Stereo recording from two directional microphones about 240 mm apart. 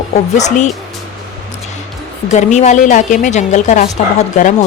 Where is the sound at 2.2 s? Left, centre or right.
Left.